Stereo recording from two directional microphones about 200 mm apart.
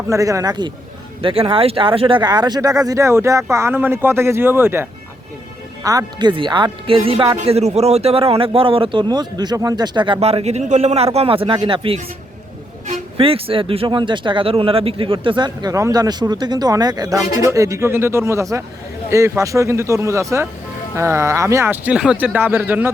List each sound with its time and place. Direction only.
0.1 s speech: 15° right (ahead or behind)